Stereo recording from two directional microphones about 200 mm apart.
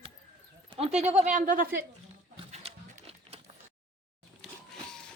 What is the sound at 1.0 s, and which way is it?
Speech, 35° right (ahead or behind).